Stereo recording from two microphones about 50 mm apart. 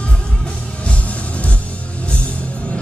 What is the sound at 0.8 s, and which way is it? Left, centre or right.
Music, left.